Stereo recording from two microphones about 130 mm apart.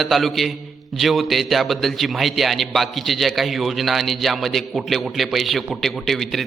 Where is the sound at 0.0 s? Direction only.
Centre (ahead or behind).